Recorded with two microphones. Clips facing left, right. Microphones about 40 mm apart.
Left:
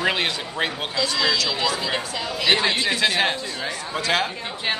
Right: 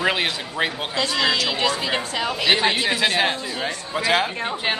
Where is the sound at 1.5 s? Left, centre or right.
Right.